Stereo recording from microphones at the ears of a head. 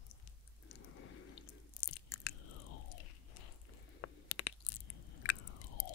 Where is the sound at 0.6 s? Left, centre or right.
Left.